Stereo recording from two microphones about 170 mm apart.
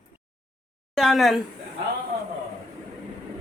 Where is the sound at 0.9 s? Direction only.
Centre (ahead or behind).